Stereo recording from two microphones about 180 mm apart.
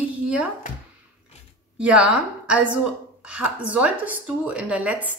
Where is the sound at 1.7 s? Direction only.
5° right (ahead or behind).